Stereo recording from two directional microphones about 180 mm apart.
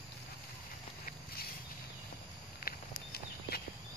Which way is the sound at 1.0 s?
55° left (ahead or behind).